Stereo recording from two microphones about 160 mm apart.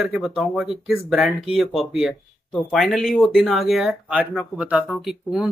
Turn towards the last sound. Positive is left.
turn(degrees=0)  # may be behind; listen again after turning